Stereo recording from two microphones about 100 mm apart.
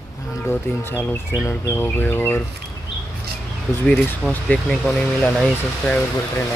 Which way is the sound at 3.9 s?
10° left (ahead or behind).